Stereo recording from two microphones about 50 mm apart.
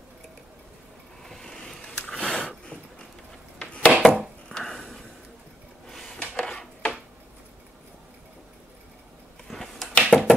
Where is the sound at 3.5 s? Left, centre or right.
Left.